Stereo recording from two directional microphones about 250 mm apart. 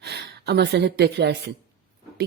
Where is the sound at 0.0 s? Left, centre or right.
Right.